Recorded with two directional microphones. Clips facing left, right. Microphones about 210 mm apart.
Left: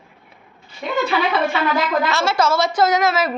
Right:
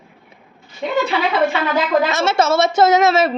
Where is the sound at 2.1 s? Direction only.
20° right (ahead or behind).